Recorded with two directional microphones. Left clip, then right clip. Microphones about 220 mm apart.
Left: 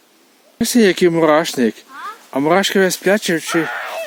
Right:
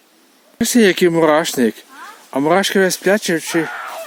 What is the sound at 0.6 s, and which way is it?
Speech, centre (ahead or behind).